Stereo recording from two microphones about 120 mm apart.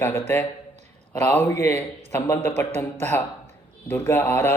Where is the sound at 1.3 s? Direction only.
15° left (ahead or behind).